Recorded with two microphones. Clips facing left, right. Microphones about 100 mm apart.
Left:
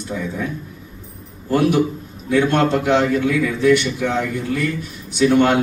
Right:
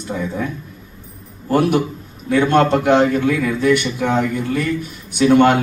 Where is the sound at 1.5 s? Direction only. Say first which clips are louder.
Even; 50° right (ahead or behind).